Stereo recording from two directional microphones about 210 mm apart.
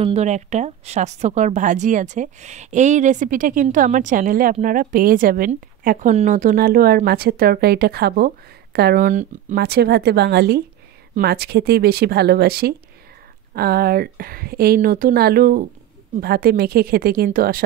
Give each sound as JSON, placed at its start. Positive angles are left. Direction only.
{"t": 0.0, "sound": "a woman's voice", "side_deg": -30}